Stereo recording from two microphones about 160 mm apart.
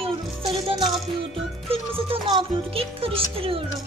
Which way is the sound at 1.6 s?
35° right (ahead or behind).